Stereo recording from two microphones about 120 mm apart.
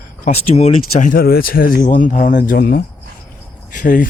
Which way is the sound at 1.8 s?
90° left.